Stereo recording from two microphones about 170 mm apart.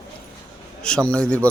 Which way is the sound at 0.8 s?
5° left (ahead or behind).